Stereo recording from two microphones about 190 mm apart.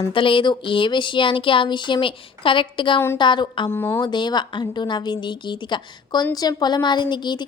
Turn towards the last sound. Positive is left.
turn(degrees=25)  # may be behind; listen again after turning